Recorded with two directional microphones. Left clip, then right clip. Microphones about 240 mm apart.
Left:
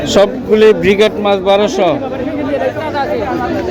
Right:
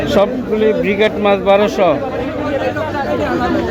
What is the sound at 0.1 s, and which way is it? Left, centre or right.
A man's voice, centre.